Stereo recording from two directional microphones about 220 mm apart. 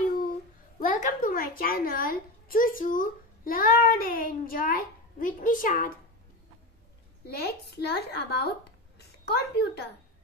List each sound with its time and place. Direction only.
0.7 s a child's voice: 35° left (ahead or behind)
7.2 s speech: 45° left (ahead or behind)